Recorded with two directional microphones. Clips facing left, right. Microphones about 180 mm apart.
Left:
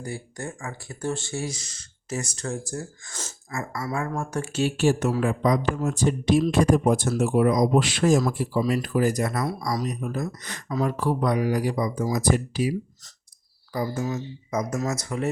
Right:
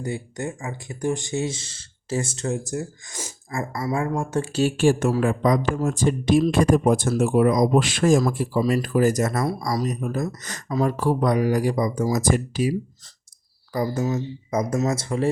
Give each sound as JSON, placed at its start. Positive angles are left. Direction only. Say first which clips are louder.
{"t": 0.0, "sound": "speech", "louder": "right 5 dB", "side_deg": -20}
{"t": 3.8, "sound": "speech", "louder": "right 5 dB", "side_deg": -25}
{"t": 4.6, "sound": "speech", "louder": "right 3 dB", "side_deg": -50}
{"t": 13.7, "sound": "speech", "louder": "right 4 dB", "side_deg": -35}